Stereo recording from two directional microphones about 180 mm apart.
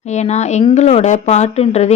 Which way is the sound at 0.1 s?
40° left (ahead or behind).